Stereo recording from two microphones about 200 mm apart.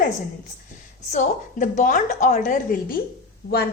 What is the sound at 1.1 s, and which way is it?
A woman's voice, 40° left (ahead or behind).